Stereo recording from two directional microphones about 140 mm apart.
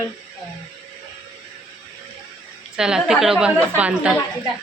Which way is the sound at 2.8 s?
5° right (ahead or behind).